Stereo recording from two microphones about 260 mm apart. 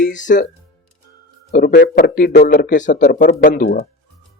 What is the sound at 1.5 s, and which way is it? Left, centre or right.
Speech, left.